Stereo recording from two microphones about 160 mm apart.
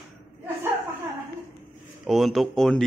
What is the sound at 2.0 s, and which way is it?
Speech, centre (ahead or behind).